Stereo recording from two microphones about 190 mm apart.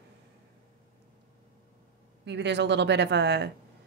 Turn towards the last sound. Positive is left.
turn(degrees=-65)  # may be behind; listen again after turning